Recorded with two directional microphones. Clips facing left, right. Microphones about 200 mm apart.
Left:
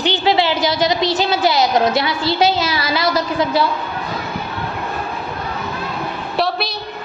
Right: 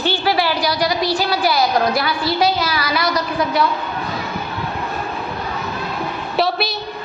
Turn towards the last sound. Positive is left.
turn(degrees=0)  # may be behind; listen again after turning